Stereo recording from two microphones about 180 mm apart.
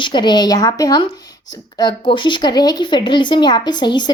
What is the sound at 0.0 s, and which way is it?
A woman's voice, 25° left (ahead or behind).